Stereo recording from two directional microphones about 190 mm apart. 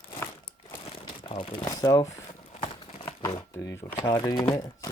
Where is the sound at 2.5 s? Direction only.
30° left (ahead or behind).